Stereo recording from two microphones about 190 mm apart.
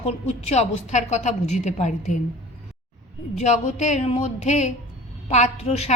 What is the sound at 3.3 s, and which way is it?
A woman's voice, 35° left (ahead or behind).